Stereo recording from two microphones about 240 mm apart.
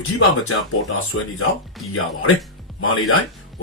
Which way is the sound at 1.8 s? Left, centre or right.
Centre.